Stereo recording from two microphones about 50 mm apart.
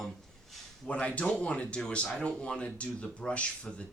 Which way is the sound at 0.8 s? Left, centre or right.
Left.